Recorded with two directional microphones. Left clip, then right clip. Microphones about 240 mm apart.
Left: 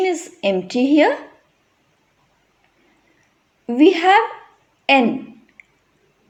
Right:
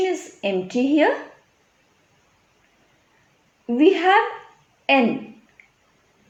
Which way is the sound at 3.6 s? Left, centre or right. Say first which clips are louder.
Left 3 dB; left.